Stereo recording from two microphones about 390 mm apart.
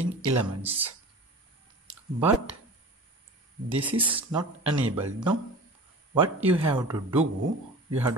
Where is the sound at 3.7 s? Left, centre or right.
Centre.